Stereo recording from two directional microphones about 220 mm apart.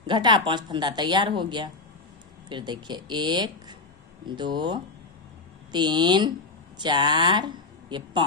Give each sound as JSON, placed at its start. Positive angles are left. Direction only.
{"t": 0.0, "sound": "a woman's voice", "side_deg": -20}